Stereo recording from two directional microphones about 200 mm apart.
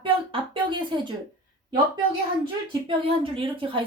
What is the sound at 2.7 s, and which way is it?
A woman's voice, 25° right (ahead or behind).